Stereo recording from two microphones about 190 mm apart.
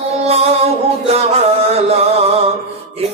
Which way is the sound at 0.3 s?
35° right (ahead or behind).